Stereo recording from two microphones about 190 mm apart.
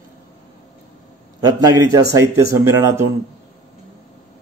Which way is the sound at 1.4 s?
20° right (ahead or behind).